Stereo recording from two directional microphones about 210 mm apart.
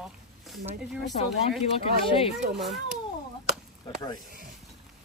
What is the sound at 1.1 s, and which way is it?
Speech, 35° left (ahead or behind).